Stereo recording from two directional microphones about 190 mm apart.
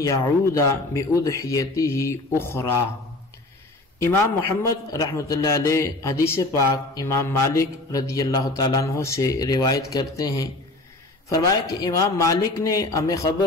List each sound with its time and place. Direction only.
0.0 s a man's voice: 15° left (ahead or behind)
4.0 s a man's voice: 15° left (ahead or behind)